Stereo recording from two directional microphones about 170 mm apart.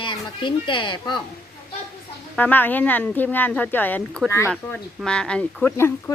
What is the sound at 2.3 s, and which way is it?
Speech, 10° left (ahead or behind).